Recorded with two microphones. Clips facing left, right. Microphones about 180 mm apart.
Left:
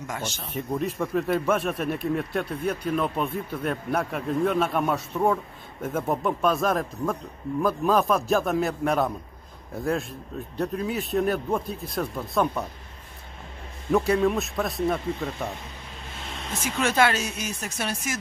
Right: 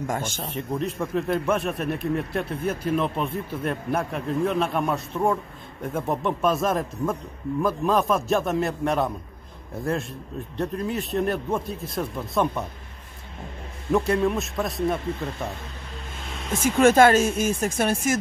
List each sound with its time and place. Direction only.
0.0 s speech: 50° right (ahead or behind)
0.5 s speech: centre (ahead or behind)
13.9 s speech: centre (ahead or behind)
16.5 s speech: 50° right (ahead or behind)